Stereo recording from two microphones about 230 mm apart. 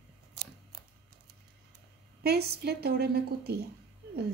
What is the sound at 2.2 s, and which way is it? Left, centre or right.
Speech, right.